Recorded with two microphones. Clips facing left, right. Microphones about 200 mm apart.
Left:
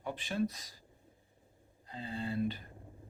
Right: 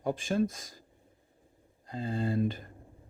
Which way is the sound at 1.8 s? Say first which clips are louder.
Right 7 dB; 45° right (ahead or behind).